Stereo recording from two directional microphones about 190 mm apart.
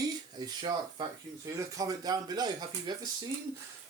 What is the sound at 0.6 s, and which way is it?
Speech, 20° right (ahead or behind).